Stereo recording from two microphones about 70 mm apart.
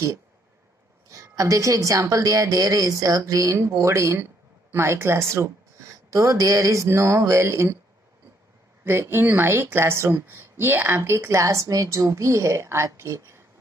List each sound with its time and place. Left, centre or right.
1.1 s speech: right
6.0 s speech: right
8.8 s speech: right